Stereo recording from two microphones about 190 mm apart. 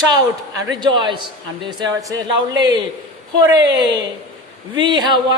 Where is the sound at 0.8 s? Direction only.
25° right (ahead or behind).